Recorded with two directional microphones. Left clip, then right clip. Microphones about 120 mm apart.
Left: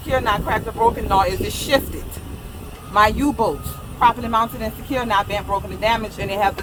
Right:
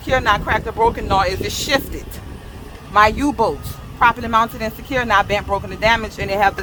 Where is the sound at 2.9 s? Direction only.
90° right.